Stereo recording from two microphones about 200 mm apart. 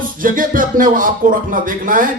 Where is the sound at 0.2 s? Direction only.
45° right (ahead or behind).